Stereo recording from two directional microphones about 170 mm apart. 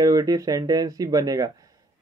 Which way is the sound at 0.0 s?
20° right (ahead or behind).